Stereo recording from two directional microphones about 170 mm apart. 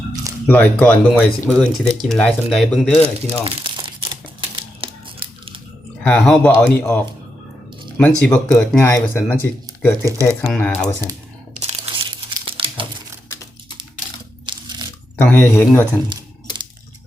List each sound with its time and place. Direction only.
0.4 s speech: 10° left (ahead or behind)
3.2 s crumpling: 30° right (ahead or behind)
6.0 s speech: 5° left (ahead or behind)
11.8 s crumpling: 30° right (ahead or behind)
14.4 s a sound: 25° right (ahead or behind)
15.4 s speech: 10° left (ahead or behind)